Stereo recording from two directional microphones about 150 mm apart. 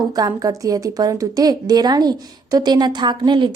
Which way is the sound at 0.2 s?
25° right (ahead or behind).